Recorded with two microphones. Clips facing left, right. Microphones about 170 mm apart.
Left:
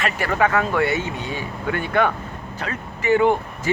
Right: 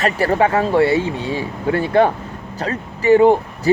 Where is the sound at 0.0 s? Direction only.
35° right (ahead or behind).